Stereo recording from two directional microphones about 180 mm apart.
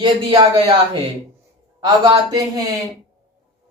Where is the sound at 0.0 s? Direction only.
25° right (ahead or behind).